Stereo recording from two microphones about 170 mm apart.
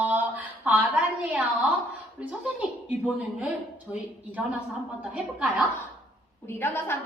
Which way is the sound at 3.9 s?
15° left (ahead or behind).